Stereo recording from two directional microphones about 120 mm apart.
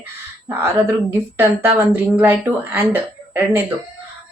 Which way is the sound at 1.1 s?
15° right (ahead or behind).